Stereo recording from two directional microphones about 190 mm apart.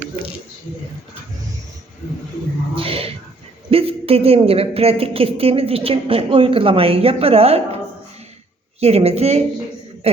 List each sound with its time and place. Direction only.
2.7 s a sound: 30° right (ahead or behind)
3.7 s a woman's voice: 30° right (ahead or behind)
8.8 s a woman's voice: 35° right (ahead or behind)